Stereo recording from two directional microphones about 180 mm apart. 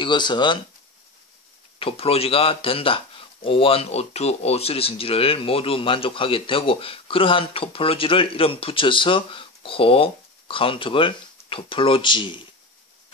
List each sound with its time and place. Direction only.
0.0 s speech: 25° left (ahead or behind)
1.8 s speech: 30° left (ahead or behind)